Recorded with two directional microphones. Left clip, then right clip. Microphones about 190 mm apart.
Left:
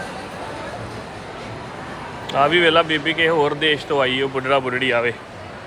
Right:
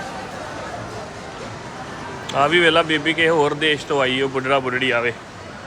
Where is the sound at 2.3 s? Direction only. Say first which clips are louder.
Even; 15° right (ahead or behind).